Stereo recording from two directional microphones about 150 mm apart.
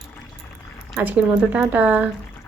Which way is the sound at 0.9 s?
10° right (ahead or behind).